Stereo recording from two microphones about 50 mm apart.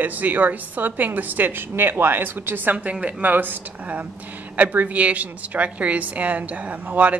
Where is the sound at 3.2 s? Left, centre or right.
Right.